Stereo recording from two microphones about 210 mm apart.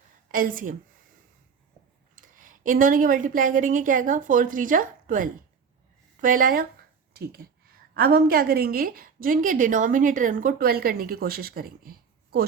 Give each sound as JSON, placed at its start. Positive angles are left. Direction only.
{"t": 0.3, "sound": "a woman's voice", "side_deg": -40}
{"t": 2.1, "sound": "a woman's voice", "side_deg": -40}